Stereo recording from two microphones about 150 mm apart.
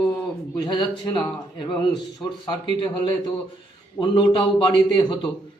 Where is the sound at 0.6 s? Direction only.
30° left (ahead or behind).